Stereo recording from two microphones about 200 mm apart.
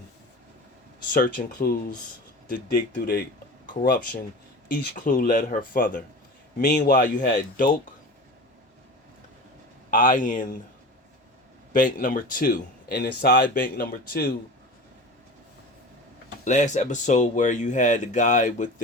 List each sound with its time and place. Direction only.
1.1 s speech: 45° left (ahead or behind)
4.7 s speech: 40° left (ahead or behind)
9.9 s speech: 45° left (ahead or behind)
11.7 s speech: 40° left (ahead or behind)
16.4 s speech: 35° left (ahead or behind)